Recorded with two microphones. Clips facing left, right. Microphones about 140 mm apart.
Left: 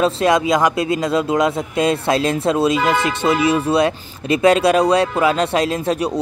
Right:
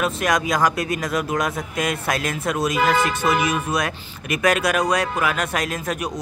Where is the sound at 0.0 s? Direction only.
25° left (ahead or behind).